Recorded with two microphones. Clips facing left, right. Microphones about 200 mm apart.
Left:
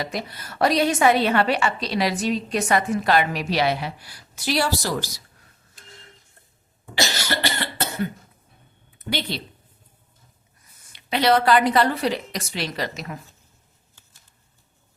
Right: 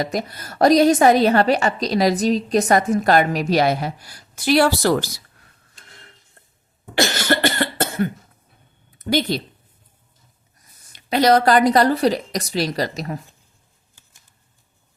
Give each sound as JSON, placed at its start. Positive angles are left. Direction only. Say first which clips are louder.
{"t": 0.0, "sound": "a woman's voice", "louder": "right 5 dB", "side_deg": -45}
{"t": 6.9, "sound": "cough", "louder": "right 6 dB", "side_deg": -55}
{"t": 9.0, "sound": "a sound", "louder": "right 8 dB", "side_deg": -45}
{"t": 10.9, "sound": "a woman's voice", "louder": "right 4 dB", "side_deg": -40}